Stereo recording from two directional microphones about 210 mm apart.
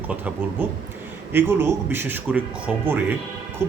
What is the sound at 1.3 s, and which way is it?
Speech, 10° right (ahead or behind).